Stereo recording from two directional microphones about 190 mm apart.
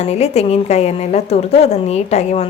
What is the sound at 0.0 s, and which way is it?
Speech, 35° left (ahead or behind).